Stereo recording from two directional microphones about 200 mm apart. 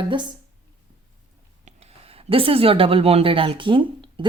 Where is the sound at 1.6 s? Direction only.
30° right (ahead or behind).